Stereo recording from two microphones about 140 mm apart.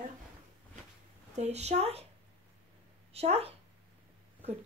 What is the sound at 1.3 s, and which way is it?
Speech, 50° right (ahead or behind).